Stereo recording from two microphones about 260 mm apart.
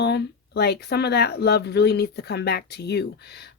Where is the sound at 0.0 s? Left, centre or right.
Left.